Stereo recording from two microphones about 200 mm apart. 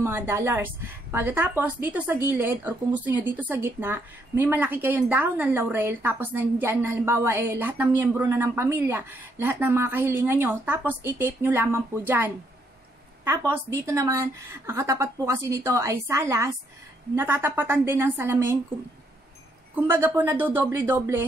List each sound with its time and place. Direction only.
0.0 s a woman's voice: 10° right (ahead or behind)
13.2 s a woman's voice: 10° right (ahead or behind)
19.7 s a woman's voice: 10° right (ahead or behind)